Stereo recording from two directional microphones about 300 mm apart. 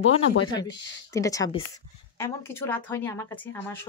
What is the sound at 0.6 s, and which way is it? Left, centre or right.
Speech, centre.